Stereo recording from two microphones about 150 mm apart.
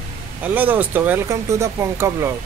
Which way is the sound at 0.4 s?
10° right (ahead or behind).